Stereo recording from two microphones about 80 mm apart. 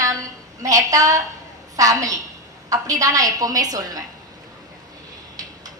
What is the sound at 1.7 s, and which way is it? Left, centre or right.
A woman's voice, right.